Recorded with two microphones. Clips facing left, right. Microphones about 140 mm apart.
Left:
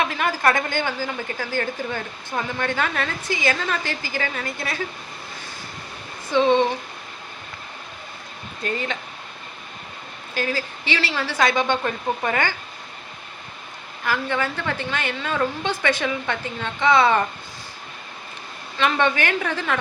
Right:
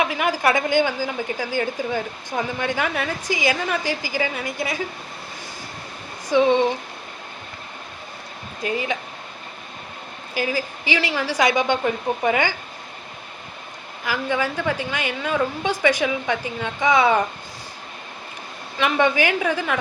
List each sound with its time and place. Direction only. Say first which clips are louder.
0.0 s a woman's voice: right 1 dB; 15° right (ahead or behind)
6.3 s a woman's voice: right 1 dB; 15° right (ahead or behind)
8.6 s a woman's voice: right 2 dB; 10° right (ahead or behind)
10.3 s a woman's voice: right 1 dB; 10° right (ahead or behind)
14.0 s a woman's voice: right 1 dB; 10° right (ahead or behind)
18.8 s a woman's voice: right 2 dB; 15° right (ahead or behind)